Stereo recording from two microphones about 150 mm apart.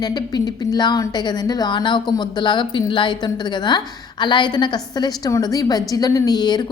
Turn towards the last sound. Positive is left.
turn(degrees=30)  # may be behind; listen again after turning